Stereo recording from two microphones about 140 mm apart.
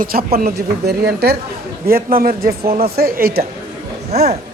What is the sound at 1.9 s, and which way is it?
A man's voice, 90° right.